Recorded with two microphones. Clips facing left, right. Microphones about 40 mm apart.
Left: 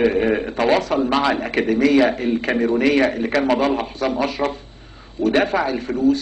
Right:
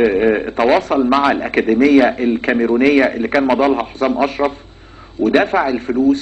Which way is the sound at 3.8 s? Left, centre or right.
Right.